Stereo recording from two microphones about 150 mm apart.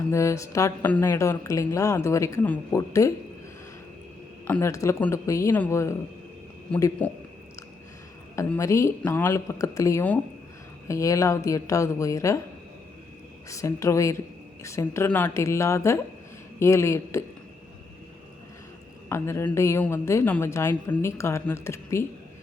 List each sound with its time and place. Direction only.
0.1 s a woman's voice: 20° left (ahead or behind)
4.4 s a woman's voice: 15° left (ahead or behind)
7.0 s a woman's voice: 10° left (ahead or behind)
8.5 s a woman's voice: 20° left (ahead or behind)
13.5 s a woman's voice: 20° left (ahead or behind)
19.0 s a woman's voice: 15° left (ahead or behind)